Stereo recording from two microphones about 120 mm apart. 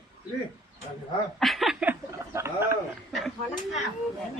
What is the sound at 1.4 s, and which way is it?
Speech, centre (ahead or behind).